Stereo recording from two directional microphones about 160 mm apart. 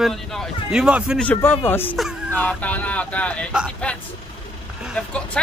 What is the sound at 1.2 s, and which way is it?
Speech, 10° left (ahead or behind).